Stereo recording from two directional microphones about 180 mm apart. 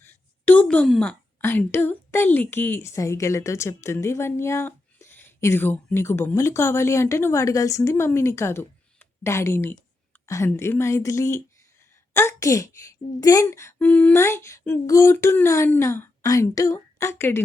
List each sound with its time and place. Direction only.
0.0 s a woman's voice: 10° left (ahead or behind)